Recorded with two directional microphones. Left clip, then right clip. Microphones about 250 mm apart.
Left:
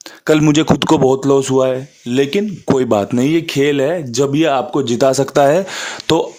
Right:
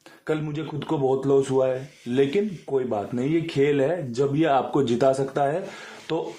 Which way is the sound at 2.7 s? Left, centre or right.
Left.